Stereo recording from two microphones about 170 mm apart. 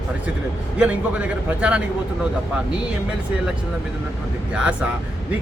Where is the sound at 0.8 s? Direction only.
10° right (ahead or behind).